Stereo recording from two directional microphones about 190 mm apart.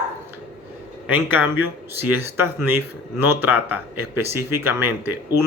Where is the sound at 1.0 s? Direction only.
10° right (ahead or behind).